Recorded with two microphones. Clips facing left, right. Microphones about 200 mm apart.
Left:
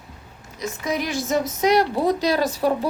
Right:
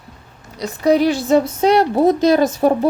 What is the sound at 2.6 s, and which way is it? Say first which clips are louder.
Speech: right 5 dB; 45° right (ahead or behind).